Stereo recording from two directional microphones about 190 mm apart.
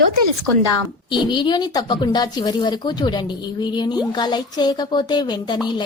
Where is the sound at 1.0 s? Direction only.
25° left (ahead or behind).